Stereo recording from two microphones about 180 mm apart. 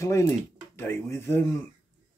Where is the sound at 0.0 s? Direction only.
15° left (ahead or behind).